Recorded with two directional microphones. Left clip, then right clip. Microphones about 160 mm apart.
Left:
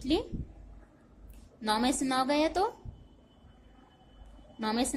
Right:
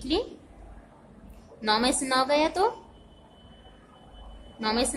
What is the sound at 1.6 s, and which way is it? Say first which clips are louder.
A woman's voice: right 5 dB; 30° left (ahead or behind).